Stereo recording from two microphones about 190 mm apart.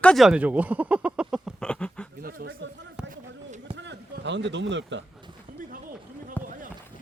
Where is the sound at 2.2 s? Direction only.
50° right (ahead or behind).